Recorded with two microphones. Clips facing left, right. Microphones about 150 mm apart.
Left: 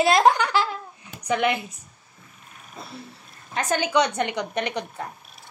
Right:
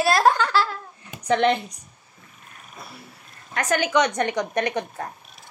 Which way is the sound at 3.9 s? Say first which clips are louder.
Right 1 dB; 10° left (ahead or behind).